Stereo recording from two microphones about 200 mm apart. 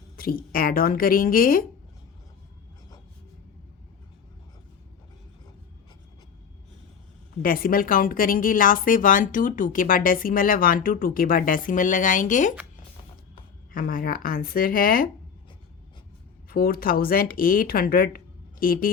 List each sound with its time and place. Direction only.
0.2 s a woman's voice: 45° left (ahead or behind)
7.4 s a woman's voice: 45° left (ahead or behind)
13.7 s a woman's voice: 45° left (ahead or behind)
16.5 s a woman's voice: 45° left (ahead or behind)